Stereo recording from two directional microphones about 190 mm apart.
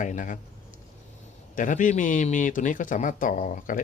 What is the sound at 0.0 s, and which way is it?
Speech, 45° left (ahead or behind).